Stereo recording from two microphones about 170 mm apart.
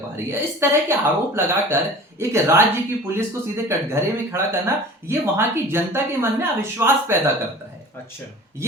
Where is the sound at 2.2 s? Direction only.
15° right (ahead or behind).